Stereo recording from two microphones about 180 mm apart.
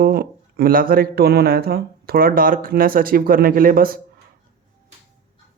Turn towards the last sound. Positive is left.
turn(degrees=-55)  # may be behind; listen again after turning